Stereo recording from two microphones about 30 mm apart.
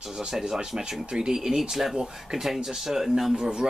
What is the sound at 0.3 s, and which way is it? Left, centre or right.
Speech, centre.